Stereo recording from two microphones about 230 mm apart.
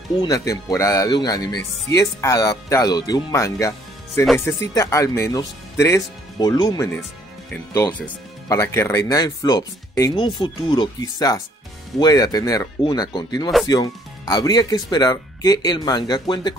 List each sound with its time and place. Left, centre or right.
0.2 s speech: centre